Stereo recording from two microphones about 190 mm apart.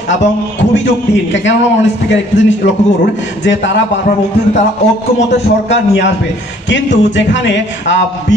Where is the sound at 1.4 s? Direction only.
70° left (ahead or behind).